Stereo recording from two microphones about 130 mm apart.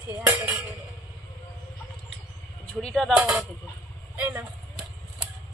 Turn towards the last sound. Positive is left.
turn(degrees=-15)  # may be behind; listen again after turning